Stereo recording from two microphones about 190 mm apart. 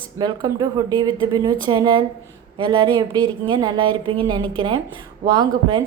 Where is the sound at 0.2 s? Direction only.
20° right (ahead or behind).